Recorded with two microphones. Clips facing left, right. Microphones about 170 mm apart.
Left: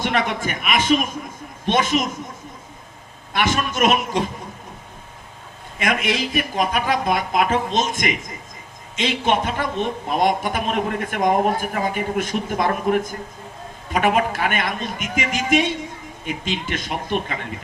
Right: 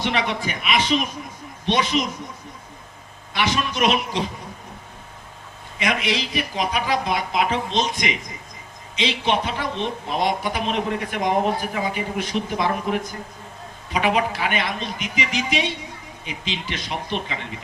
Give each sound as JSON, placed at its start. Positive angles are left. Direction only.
{"t": 0.0, "sound": "speech", "side_deg": 50}
{"t": 3.3, "sound": "speech", "side_deg": 50}
{"t": 5.8, "sound": "speech", "side_deg": 50}